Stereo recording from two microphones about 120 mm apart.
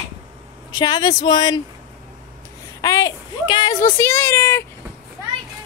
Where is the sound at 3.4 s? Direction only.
40° left (ahead or behind).